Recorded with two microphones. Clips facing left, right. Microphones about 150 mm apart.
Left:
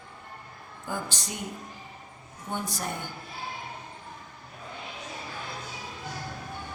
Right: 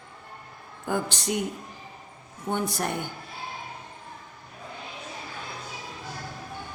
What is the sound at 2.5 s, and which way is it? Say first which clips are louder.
Speech: right 5 dB; 65° right (ahead or behind).